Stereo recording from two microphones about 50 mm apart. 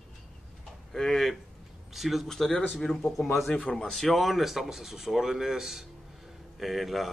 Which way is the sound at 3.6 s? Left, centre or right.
Centre.